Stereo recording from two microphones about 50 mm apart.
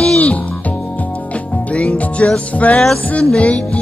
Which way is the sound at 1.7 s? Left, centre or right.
Left.